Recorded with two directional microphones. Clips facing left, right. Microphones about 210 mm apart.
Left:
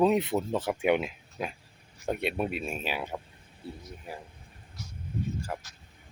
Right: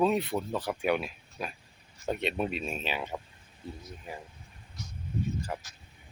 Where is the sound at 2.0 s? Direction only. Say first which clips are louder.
Left 1 dB; 10° left (ahead or behind).